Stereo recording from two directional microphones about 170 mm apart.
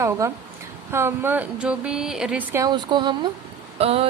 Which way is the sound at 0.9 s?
15° right (ahead or behind).